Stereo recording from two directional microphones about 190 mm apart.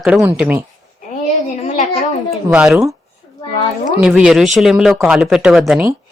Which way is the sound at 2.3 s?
5° right (ahead or behind).